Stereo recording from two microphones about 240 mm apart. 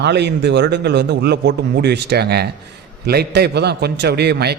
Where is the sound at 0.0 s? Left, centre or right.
Right.